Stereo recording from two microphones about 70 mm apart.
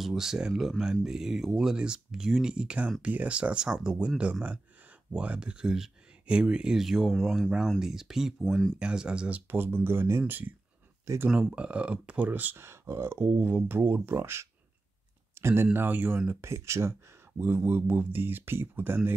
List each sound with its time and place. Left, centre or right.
0.0 s speech: centre
9.5 s speech: right
11.2 s speech: centre
12.6 s speech: right
16.3 s speech: right